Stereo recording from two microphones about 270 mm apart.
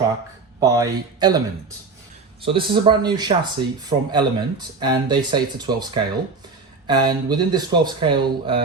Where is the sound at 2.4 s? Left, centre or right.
Centre.